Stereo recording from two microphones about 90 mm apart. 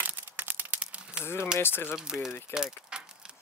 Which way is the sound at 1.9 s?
5° right (ahead or behind).